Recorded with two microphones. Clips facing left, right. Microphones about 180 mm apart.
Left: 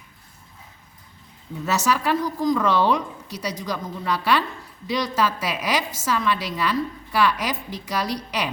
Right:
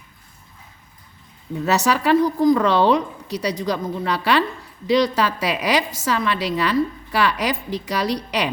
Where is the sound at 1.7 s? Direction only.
65° right (ahead or behind).